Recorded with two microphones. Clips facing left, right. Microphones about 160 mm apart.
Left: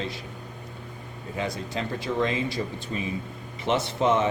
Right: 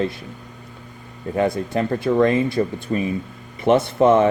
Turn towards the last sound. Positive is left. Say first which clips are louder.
# right 8 dB
turn(degrees=-55)  # may be behind; listen again after turning